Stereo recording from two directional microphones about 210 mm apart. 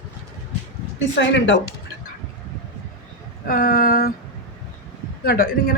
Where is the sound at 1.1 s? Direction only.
60° left (ahead or behind).